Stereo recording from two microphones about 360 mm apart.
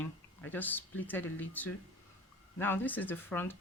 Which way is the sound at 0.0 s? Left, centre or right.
Centre.